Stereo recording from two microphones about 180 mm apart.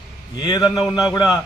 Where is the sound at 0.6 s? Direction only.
Centre (ahead or behind).